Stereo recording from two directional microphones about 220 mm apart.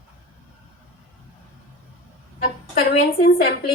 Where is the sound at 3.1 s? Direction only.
45° left (ahead or behind).